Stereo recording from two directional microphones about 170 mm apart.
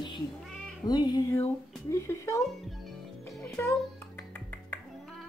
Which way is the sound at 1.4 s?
15° left (ahead or behind).